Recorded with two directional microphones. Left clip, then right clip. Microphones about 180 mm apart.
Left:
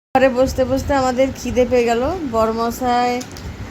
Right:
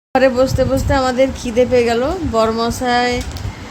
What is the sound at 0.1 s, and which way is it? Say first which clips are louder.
Speech: right 1 dB; 5° left (ahead or behind).